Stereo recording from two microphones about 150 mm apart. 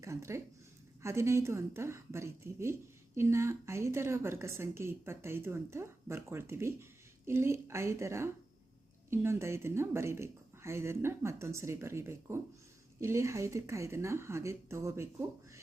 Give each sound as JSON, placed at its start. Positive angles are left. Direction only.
{"t": 0.0, "sound": "a woman's voice", "side_deg": -20}